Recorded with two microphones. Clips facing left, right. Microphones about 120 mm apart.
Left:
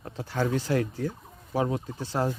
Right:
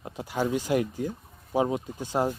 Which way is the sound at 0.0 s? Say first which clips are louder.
Even; 15° right (ahead or behind).